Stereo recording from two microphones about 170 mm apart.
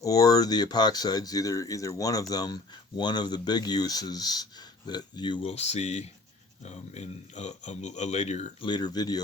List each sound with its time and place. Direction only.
0.0 s speech: 20° left (ahead or behind); by 8.5 s 40° left (ahead or behind)
8.6 s speech: 25° left (ahead or behind)